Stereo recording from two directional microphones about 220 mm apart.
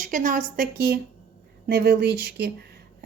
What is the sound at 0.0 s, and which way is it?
A woman's voice, 35° right (ahead or behind).